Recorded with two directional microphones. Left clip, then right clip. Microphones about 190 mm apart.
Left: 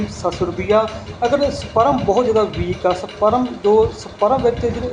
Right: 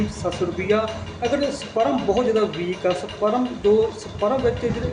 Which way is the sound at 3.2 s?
10° right (ahead or behind).